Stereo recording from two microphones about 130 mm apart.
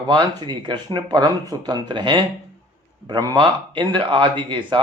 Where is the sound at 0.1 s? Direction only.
35° right (ahead or behind).